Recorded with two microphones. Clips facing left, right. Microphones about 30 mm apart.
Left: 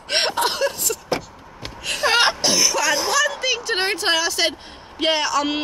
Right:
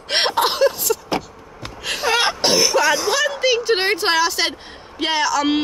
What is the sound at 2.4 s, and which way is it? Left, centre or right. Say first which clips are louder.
Throat clearing: right 3 dB; right.